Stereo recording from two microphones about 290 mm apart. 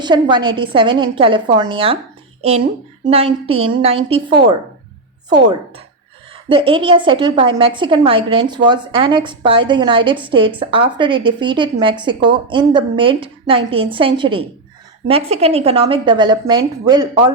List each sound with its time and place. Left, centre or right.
0.0 s a woman's voice: centre
3.1 s a woman's voice: right
6.5 s a woman's voice: centre